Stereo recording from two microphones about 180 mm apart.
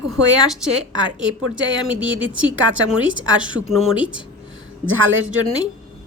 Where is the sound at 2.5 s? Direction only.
90° right.